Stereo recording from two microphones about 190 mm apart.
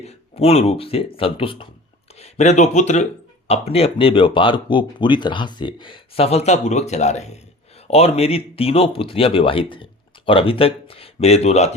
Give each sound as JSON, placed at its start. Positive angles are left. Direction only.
{"t": 0.0, "sound": "speech", "side_deg": 35}